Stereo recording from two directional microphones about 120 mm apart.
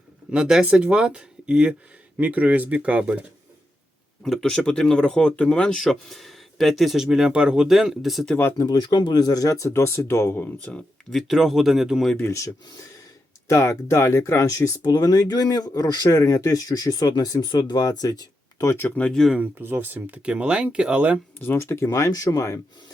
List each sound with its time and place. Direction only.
0.3 s speech: 5° right (ahead or behind)
4.2 s speech: 5° left (ahead or behind)
8.4 s speech: 20° left (ahead or behind)
8.6 s speech: 35° left (ahead or behind); by 11.2 s 10° left (ahead or behind)
11.2 s speech: centre (ahead or behind)
12.1 s speech: 25° left (ahead or behind); by 19.4 s centre (ahead or behind)
19.4 s speech: 20° right (ahead or behind)
21.4 s speech: 20° left (ahead or behind)